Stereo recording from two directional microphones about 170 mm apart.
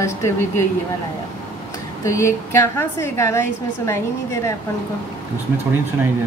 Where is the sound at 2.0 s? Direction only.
15° left (ahead or behind).